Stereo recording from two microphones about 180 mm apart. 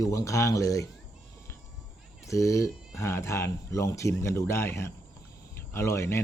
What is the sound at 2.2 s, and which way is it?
Speech, 15° left (ahead or behind).